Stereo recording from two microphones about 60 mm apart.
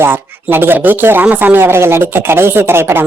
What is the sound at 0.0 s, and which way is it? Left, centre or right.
Speech, right.